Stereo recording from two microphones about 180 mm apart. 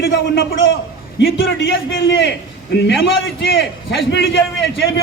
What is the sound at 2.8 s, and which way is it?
A man's voice, 85° left.